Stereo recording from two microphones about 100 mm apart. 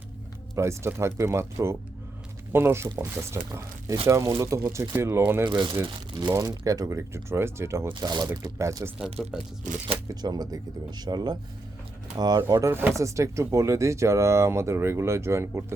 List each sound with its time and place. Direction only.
0.5 s speech: 30° right (ahead or behind)
5.5 s speech: 50° right (ahead or behind)
6.3 s speech: 35° right (ahead or behind)
7.9 s speech: 45° right (ahead or behind)
8.4 s speech: 30° right (ahead or behind)
9.2 s speech: centre (ahead or behind)
10.2 s speech: 40° right (ahead or behind)
12.5 s speech: 30° right (ahead or behind)